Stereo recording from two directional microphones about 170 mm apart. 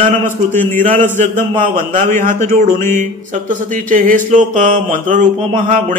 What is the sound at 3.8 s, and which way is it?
A man's voice, 55° right (ahead or behind).